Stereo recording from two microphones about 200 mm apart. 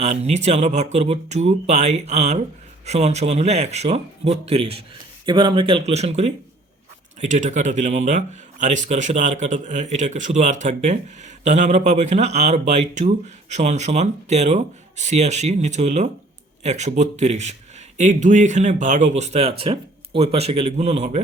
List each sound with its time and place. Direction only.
0.0 s a man's voice: 35° right (ahead or behind)